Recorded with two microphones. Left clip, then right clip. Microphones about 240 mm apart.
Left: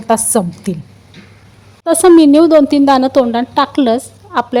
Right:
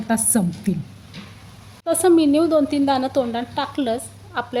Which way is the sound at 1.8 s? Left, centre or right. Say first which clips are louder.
Left 9 dB; left.